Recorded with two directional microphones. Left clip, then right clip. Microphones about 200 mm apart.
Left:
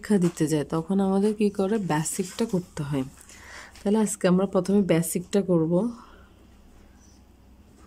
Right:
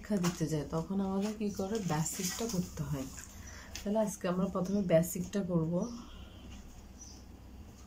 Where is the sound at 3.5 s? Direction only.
55° left (ahead or behind).